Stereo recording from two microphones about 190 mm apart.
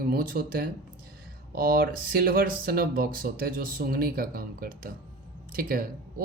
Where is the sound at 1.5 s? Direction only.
50° right (ahead or behind).